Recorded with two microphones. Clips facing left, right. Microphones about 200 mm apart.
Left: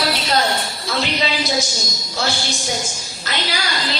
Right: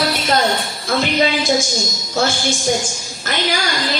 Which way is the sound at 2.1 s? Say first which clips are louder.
Right 5 dB; 50° right (ahead or behind).